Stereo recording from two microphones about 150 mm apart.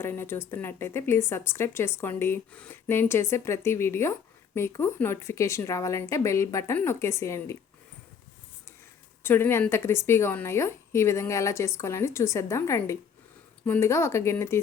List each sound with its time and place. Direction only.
0.0 s a woman's voice: 15° left (ahead or behind)
9.2 s a woman's voice: 15° left (ahead or behind)